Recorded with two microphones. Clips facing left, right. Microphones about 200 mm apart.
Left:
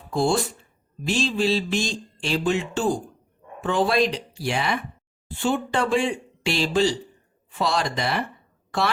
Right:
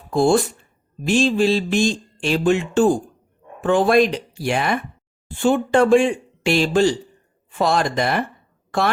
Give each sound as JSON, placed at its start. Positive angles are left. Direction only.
{"t": 0.1, "sound": "speech", "side_deg": -50}